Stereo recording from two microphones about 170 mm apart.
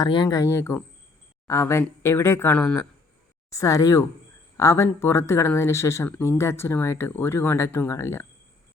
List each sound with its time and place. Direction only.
0.0 s speech: 25° left (ahead or behind); by 2.8 s 10° left (ahead or behind)
3.5 s speech: 20° left (ahead or behind)